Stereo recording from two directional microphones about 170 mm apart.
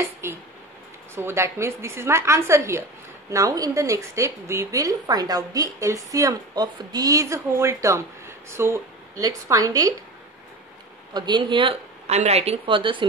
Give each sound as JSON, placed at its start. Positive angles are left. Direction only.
{"t": 0.2, "sound": "a woman's voice", "side_deg": -15}
{"t": 11.1, "sound": "speech", "side_deg": -25}